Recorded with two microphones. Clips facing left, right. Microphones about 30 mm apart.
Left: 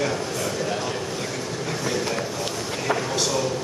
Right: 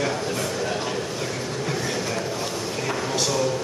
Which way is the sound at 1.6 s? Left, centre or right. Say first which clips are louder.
Left 2 dB; centre.